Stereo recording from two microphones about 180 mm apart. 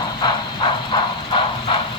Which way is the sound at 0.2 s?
25° left (ahead or behind).